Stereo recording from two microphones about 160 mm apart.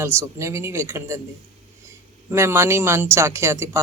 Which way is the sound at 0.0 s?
15° right (ahead or behind).